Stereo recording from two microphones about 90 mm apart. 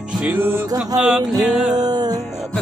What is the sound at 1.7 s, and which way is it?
Music, 50° right (ahead or behind).